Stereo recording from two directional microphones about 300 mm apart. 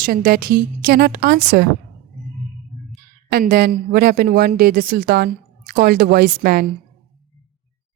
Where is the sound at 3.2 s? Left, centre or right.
Right.